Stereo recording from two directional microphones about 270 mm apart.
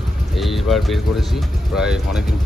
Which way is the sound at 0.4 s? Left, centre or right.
Centre.